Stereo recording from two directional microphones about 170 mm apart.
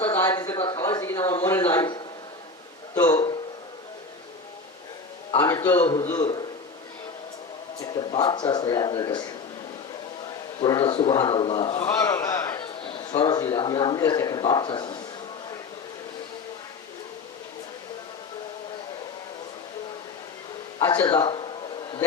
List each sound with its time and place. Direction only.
0.1 s a sound: 20° left (ahead or behind)
5.5 s a sound: 20° left (ahead or behind)
5.8 s a man's voice: 25° left (ahead or behind)
7.8 s a man's voice: 25° left (ahead or behind)
10.6 s a man's voice: 25° left (ahead or behind)
12.8 s a man's voice: 30° left (ahead or behind)
20.7 s speech: 20° left (ahead or behind)